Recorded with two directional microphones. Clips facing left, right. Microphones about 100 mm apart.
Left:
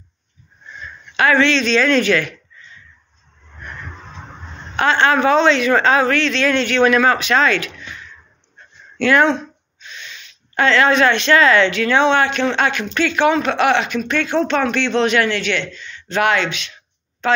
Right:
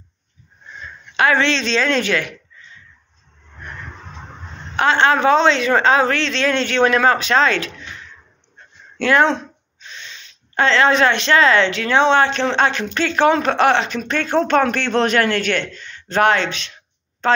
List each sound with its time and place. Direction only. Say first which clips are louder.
1.1 s speech: left 2 dB; 25° right (ahead or behind)
4.7 s a woman's voice: even; 20° right (ahead or behind); by 17.4 s 35° right (ahead or behind)